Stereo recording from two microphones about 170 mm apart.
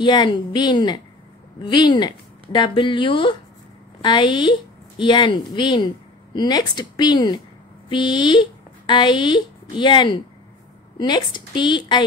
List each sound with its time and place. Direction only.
0.0 s a woman's voice: 25° left (ahead or behind)